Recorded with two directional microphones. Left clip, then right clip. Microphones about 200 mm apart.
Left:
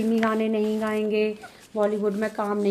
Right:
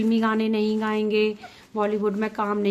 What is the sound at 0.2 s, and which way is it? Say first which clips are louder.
A woman's voice: even; 25° right (ahead or behind).